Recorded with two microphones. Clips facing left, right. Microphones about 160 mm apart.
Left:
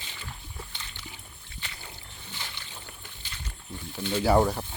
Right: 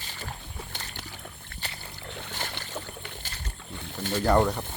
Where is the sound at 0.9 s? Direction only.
65° right (ahead or behind).